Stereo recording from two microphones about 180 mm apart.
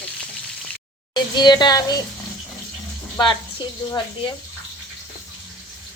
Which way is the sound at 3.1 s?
25° left (ahead or behind).